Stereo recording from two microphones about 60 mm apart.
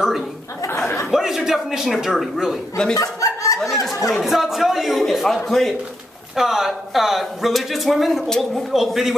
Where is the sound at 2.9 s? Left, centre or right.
Left.